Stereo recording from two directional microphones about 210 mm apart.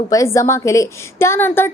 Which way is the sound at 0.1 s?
15° left (ahead or behind).